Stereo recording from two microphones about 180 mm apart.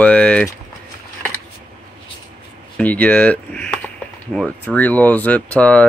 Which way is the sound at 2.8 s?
10° left (ahead or behind).